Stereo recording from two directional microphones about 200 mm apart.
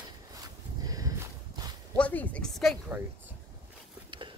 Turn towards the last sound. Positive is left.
turn(degrees=-25)  # may be behind; listen again after turning